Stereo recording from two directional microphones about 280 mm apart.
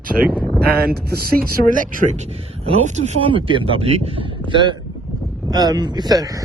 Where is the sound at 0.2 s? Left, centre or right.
Right.